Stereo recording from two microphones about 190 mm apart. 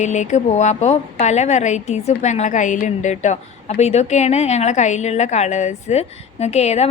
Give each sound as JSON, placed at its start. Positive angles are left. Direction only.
{"t": 0.0, "sound": "a woman's voice", "side_deg": 40}